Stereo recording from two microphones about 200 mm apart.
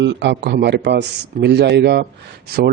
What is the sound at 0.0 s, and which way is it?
Speech, 65° right (ahead or behind).